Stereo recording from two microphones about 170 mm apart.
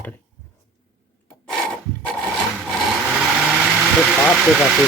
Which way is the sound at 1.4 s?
5° left (ahead or behind).